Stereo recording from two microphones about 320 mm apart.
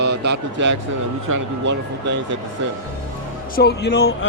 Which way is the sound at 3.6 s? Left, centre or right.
Left.